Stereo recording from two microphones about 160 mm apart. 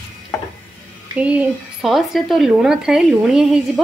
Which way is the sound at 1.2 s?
10° right (ahead or behind).